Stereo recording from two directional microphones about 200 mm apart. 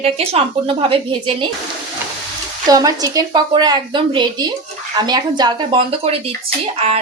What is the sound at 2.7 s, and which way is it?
A woman's voice, 20° right (ahead or behind).